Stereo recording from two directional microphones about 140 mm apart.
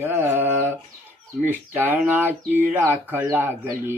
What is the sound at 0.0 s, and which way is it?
Mantra, 15° right (ahead or behind).